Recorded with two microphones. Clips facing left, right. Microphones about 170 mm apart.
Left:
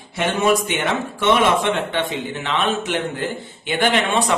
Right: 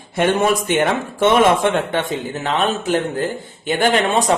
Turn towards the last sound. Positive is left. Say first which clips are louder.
# right 2 dB
turn(degrees=-40)  # may be behind; listen again after turning